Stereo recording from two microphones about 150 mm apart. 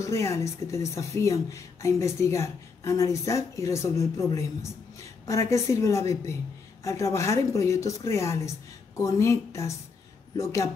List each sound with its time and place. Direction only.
0.0 s a woman's voice: 20° left (ahead or behind)